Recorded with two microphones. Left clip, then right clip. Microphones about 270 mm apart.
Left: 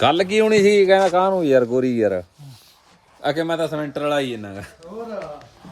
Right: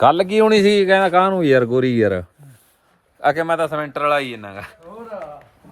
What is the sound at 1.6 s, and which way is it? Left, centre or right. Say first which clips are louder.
Speech: right 2 dB; right.